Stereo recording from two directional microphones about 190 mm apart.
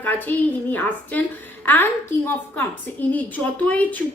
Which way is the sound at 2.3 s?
10° left (ahead or behind).